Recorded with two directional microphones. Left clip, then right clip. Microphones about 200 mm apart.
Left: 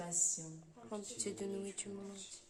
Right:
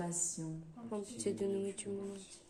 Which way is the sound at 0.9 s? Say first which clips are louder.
Right 5 dB; 15° left (ahead or behind).